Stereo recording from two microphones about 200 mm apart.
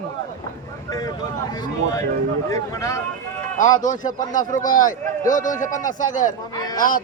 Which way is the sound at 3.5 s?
40° left (ahead or behind).